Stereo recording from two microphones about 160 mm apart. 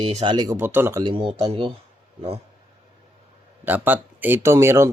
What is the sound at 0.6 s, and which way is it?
Speech, 15° right (ahead or behind).